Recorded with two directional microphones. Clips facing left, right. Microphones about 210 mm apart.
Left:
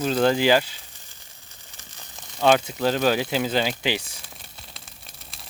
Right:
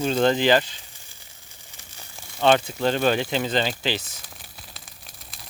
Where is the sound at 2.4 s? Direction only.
5° left (ahead or behind).